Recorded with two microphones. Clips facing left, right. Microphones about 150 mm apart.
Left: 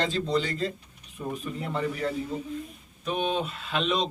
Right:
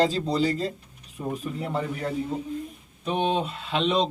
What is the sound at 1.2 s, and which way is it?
Speech, 20° right (ahead or behind).